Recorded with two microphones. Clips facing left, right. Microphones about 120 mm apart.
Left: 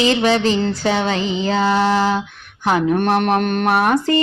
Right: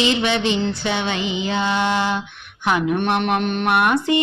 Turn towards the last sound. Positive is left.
turn(degrees=40)  # may be behind; listen again after turning